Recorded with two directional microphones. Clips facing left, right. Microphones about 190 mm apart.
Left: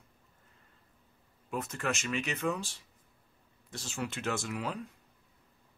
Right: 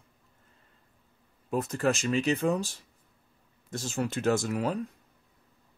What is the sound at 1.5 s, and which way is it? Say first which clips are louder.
Speech: right 7 dB; 35° right (ahead or behind).